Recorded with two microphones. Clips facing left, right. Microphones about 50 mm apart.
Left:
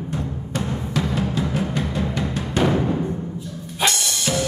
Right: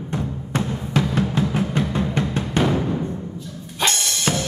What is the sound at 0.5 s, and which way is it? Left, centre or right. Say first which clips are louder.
Music: right 2 dB; right.